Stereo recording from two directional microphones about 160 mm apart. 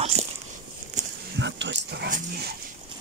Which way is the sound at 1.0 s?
50° right (ahead or behind).